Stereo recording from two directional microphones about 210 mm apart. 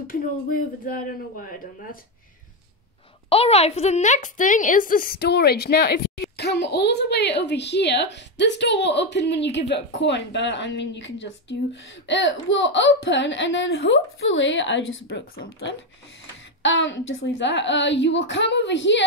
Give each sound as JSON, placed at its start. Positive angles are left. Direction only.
{"t": 0.0, "sound": "a woman's voice", "side_deg": 40}
{"t": 3.3, "sound": "a woman's voice", "side_deg": 30}
{"t": 16.6, "sound": "a woman's voice", "side_deg": 60}